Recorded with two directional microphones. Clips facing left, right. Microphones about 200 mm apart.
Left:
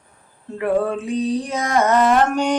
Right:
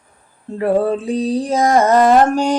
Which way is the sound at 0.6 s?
35° right (ahead or behind).